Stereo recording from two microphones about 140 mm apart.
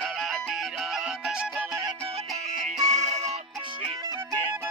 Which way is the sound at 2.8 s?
50° right (ahead or behind).